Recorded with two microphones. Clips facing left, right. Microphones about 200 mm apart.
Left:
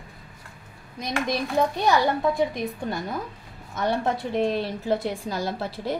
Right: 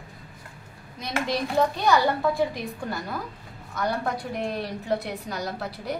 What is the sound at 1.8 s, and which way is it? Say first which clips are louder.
A woman's voice: even; 20° left (ahead or behind).